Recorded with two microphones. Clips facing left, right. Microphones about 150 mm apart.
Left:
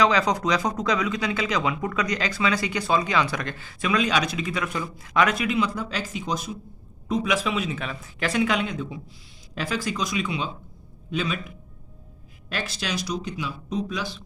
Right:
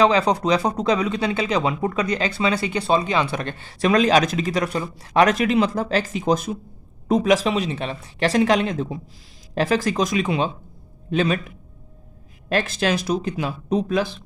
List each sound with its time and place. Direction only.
0.0 s speech: 30° right (ahead or behind)
4.1 s a man's voice: 40° right (ahead or behind)
7.1 s a man's voice: 40° right (ahead or behind)
12.5 s a man's voice: 50° right (ahead or behind)